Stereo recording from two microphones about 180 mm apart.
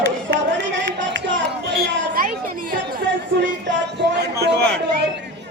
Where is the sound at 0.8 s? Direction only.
85° right; by 3.0 s 50° right (ahead or behind).